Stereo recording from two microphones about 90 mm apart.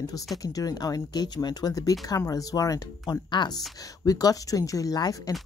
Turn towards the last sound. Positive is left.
turn(degrees=45)  # may be behind; listen again after turning